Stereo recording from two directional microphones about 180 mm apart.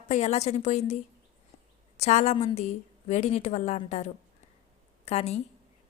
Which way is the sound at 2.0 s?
40° left (ahead or behind).